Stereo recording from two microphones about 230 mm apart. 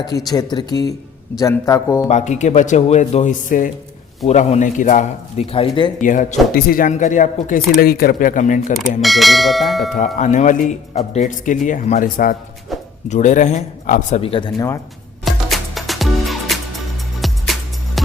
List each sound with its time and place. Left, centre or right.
0.3 s a man's voice: centre
2.0 s a man's voice: left
6.0 s speech: left
9.0 s speech: centre
10.2 s speech: left; by 14.8 s centre
15.2 s music: centre